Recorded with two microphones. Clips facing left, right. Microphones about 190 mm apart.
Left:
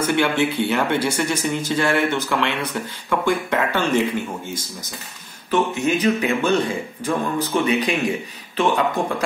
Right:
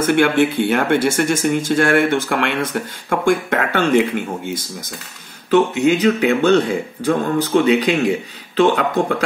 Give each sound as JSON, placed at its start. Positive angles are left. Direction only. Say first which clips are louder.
{"t": 0.0, "sound": "speech", "louder": "right 5 dB", "side_deg": -50}
{"t": 5.5, "sound": "speech", "louder": "right 6 dB", "side_deg": -80}
{"t": 8.5, "sound": "speech", "louder": "right 4 dB", "side_deg": -70}